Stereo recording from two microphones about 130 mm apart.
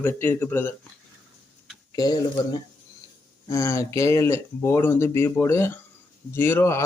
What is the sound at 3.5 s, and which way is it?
Speech, 20° left (ahead or behind).